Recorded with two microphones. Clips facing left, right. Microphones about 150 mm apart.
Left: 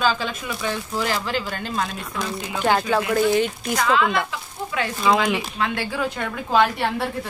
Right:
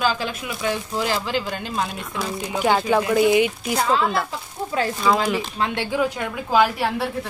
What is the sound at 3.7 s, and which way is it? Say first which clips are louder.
Speech: left 1 dB; 35° right (ahead or behind).